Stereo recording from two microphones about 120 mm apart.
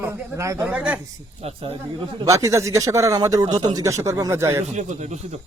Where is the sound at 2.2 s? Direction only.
25° right (ahead or behind).